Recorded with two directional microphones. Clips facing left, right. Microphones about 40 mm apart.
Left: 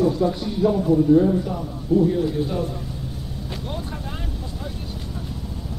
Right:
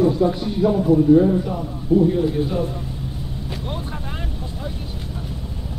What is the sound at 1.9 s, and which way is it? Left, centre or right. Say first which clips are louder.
Speech: right 2 dB; right.